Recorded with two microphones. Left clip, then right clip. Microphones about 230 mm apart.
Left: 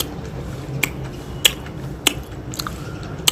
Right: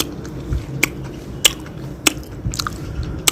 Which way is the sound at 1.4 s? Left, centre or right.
Right.